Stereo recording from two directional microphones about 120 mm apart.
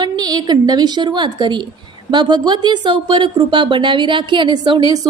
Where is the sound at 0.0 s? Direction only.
35° right (ahead or behind).